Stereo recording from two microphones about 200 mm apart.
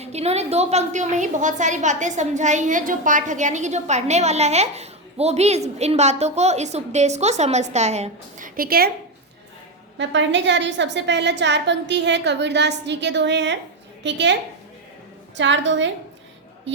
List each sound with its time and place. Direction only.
0.0 s a woman's voice: 30° right (ahead or behind); by 8.9 s 50° right (ahead or behind)
10.0 s a woman's voice: 65° right (ahead or behind)
15.4 s a woman's voice: 65° right (ahead or behind)